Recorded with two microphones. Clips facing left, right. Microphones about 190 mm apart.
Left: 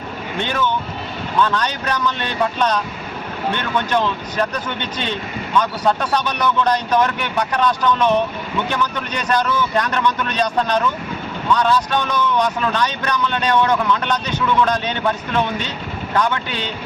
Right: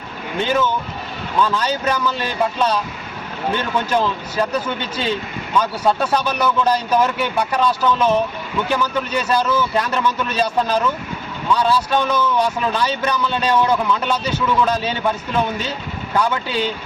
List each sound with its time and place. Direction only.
1.4 s speech: 5° right (ahead or behind)
16.1 s speech: 10° right (ahead or behind)